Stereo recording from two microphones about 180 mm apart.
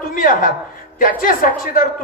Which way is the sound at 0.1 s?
50° left (ahead or behind).